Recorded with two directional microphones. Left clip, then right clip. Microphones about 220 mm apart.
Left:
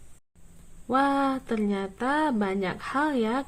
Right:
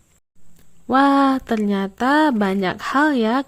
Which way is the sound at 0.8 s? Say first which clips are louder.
Right 9 dB; 35° right (ahead or behind).